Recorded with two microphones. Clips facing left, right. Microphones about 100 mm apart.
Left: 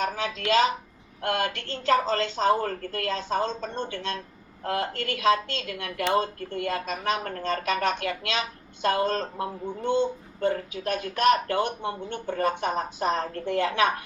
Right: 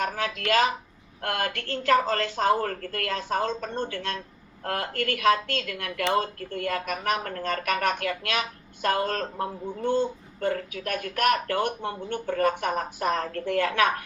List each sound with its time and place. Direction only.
0.0 s speech: 20° left (ahead or behind)